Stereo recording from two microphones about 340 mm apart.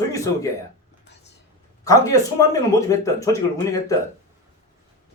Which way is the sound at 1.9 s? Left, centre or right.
Centre.